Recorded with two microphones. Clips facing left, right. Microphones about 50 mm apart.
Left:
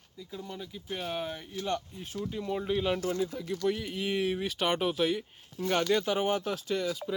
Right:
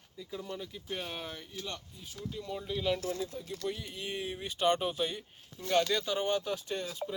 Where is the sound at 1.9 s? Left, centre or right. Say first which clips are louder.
Left 9 dB; left.